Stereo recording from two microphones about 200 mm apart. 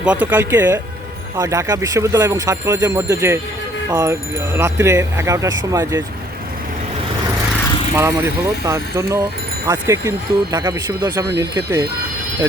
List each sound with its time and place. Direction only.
0.0 s speech: 5° right (ahead or behind)
7.9 s speech: 10° right (ahead or behind)